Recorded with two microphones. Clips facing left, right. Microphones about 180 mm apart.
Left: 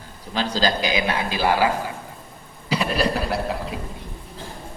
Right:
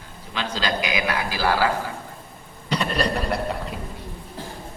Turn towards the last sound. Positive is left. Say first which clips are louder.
# left 1 dB
turn(degrees=0)  # may be behind; listen again after turning